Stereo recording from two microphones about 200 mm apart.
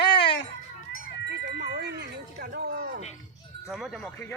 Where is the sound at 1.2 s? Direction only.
55° right (ahead or behind).